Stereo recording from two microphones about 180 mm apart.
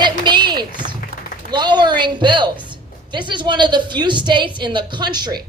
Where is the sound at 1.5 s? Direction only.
25° right (ahead or behind).